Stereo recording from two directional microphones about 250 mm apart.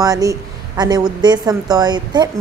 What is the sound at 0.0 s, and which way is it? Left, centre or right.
A woman's voice, centre.